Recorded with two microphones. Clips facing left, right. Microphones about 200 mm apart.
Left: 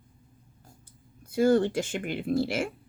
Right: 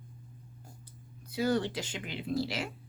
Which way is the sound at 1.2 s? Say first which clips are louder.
Left 8 dB; 50° left (ahead or behind).